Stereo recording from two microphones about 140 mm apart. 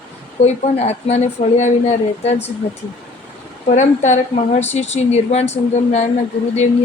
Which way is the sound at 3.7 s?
60° left (ahead or behind).